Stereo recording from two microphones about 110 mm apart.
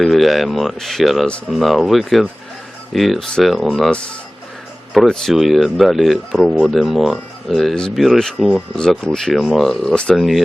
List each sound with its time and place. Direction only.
0.0 s speech: centre (ahead or behind)